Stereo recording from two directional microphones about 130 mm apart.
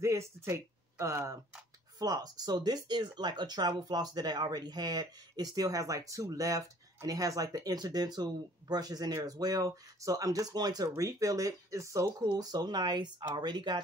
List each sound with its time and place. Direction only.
0.0 s speech: 20° right (ahead or behind)